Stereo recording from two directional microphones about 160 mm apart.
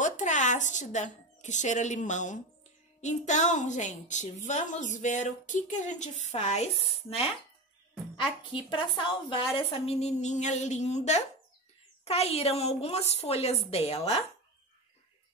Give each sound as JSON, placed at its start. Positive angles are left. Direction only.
{"t": 0.0, "sound": "a woman's voice", "side_deg": 50}